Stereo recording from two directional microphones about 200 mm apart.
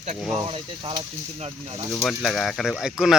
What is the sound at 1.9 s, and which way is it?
Speech, centre (ahead or behind).